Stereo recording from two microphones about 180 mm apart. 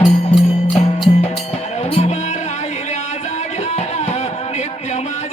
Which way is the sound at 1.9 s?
35° left (ahead or behind).